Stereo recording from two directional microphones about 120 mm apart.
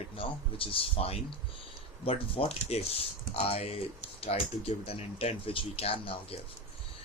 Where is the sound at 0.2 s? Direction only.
50° left (ahead or behind).